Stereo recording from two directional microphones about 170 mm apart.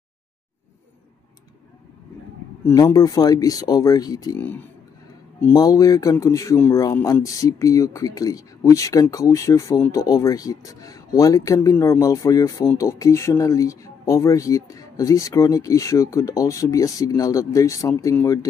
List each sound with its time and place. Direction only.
2.6 s speech: 20° left (ahead or behind)
5.5 s speech: 20° left (ahead or behind)